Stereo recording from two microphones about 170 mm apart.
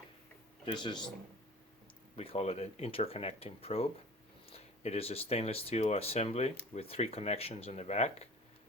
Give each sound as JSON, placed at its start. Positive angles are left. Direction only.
{"t": 0.6, "sound": "speech", "side_deg": 25}
{"t": 2.1, "sound": "speech", "side_deg": 35}